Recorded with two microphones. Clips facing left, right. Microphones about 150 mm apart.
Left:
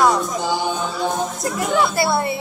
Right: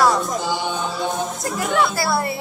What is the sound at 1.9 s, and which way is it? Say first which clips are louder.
Speech: left 2 dB; 25° left (ahead or behind).